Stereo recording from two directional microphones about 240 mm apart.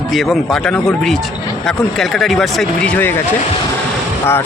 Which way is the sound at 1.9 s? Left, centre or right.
Centre.